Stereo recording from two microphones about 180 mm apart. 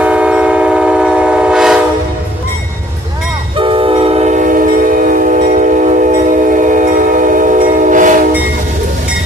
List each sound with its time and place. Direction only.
0.0 s train: 5° right (ahead or behind)
3.5 s train: 30° right (ahead or behind); by 8.2 s 45° right (ahead or behind)